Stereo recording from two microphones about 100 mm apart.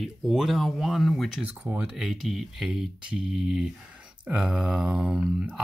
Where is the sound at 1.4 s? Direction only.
15° right (ahead or behind).